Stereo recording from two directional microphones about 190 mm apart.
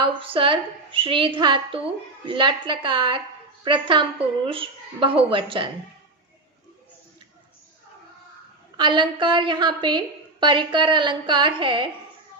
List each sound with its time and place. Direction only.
0.0 s a woman's voice: 25° right (ahead or behind)
8.8 s a woman's voice: 25° right (ahead or behind)